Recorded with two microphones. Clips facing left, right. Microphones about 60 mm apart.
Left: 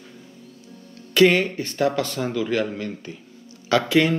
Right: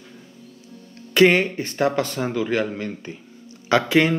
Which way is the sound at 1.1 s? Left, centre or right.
Right.